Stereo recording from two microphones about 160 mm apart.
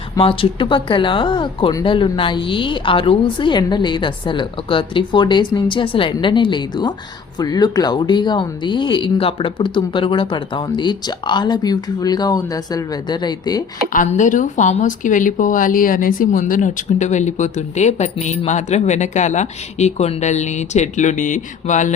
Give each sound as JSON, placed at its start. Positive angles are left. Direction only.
{"t": 0.2, "sound": "speech", "side_deg": 35}
{"t": 13.9, "sound": "speech", "side_deg": 50}